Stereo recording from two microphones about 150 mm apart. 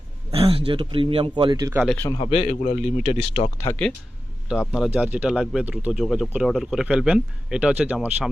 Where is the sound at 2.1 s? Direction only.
40° left (ahead or behind).